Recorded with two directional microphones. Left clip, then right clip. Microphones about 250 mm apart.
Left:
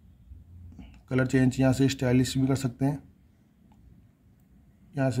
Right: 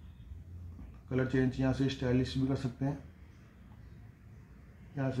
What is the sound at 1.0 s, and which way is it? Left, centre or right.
Speech, left.